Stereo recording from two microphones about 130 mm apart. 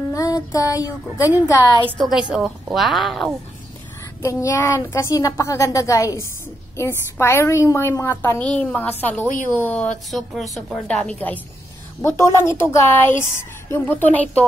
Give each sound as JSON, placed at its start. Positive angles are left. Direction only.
{"t": 0.1, "sound": "a sound", "side_deg": 25}
{"t": 1.4, "sound": "a woman's voice", "side_deg": 30}
{"t": 2.0, "sound": "a woman's voice", "side_deg": 0}
{"t": 4.2, "sound": "a woman's voice", "side_deg": 20}